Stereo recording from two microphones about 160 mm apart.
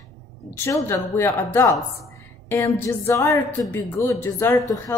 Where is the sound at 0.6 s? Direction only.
15° left (ahead or behind).